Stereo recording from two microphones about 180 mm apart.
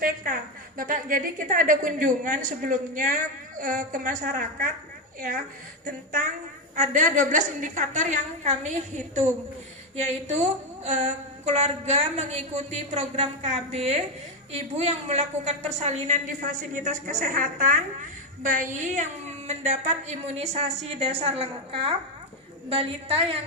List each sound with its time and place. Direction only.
0.3 s a woman's voice: 50° right (ahead or behind)
5.8 s a woman's voice: 50° right (ahead or behind); by 23.4 s 30° right (ahead or behind)